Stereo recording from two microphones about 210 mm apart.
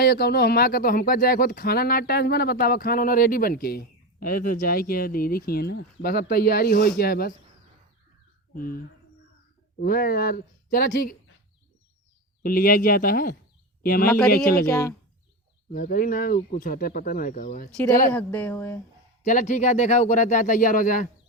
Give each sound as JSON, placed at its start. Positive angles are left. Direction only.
{"t": 0.0, "sound": "speech", "side_deg": 45}
{"t": 8.5, "sound": "speech", "side_deg": 45}
{"t": 9.8, "sound": "speech", "side_deg": 45}
{"t": 12.4, "sound": "speech", "side_deg": 45}
{"t": 14.7, "sound": "speech", "side_deg": 15}
{"t": 15.7, "sound": "speech", "side_deg": 40}
{"t": 18.1, "sound": "speech", "side_deg": 5}
{"t": 19.2, "sound": "speech", "side_deg": 35}